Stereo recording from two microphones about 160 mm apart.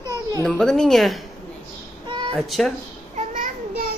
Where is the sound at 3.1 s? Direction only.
55° right (ahead or behind).